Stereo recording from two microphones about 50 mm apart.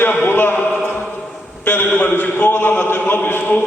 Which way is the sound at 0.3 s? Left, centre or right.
Left.